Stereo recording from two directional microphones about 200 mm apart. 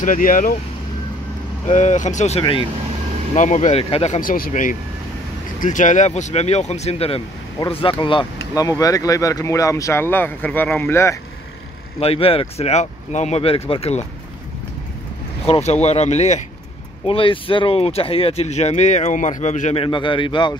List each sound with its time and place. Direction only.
0.0 s speech: 45° left (ahead or behind)
1.7 s speech: 35° left (ahead or behind); by 11.1 s 10° left (ahead or behind)
12.0 s speech: 30° left (ahead or behind)
15.4 s speech: 30° left (ahead or behind)